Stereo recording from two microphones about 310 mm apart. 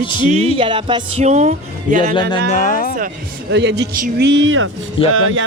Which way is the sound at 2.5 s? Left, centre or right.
Left.